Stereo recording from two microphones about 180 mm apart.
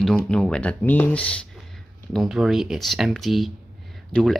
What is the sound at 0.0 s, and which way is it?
Speech, 5° left (ahead or behind).